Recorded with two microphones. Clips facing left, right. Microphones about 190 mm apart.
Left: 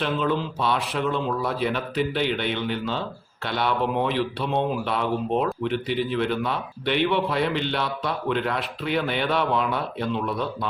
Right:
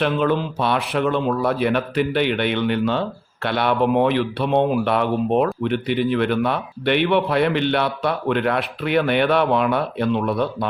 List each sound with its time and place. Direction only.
0.0 s speech: 60° right (ahead or behind)